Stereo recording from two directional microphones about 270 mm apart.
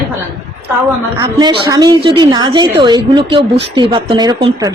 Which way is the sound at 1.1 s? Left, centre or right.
Centre.